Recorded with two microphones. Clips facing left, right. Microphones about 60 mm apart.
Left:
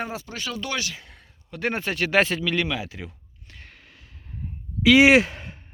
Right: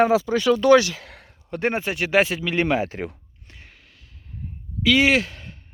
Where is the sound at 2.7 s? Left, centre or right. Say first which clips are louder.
Right 8 dB; right.